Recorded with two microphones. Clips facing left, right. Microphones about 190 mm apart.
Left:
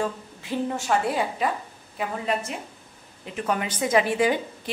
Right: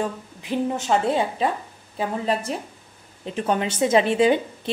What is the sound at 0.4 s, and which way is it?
A woman's voice, 20° right (ahead or behind).